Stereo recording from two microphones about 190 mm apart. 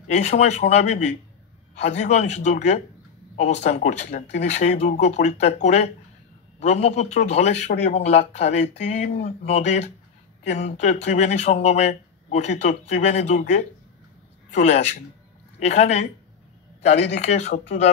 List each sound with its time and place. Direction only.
0.1 s speech: 35° left (ahead or behind)